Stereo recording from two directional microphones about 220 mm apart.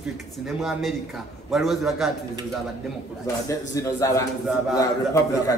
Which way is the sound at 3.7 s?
15° left (ahead or behind).